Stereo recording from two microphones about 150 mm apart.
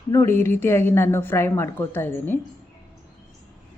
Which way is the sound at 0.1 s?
20° left (ahead or behind).